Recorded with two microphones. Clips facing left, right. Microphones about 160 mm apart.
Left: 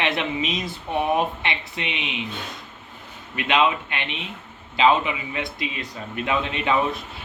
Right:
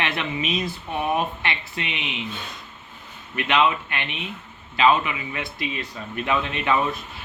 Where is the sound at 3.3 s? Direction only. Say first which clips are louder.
Even; 20° left (ahead or behind).